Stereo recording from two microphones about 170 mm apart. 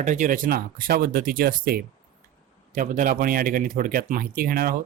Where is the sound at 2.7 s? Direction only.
50° right (ahead or behind).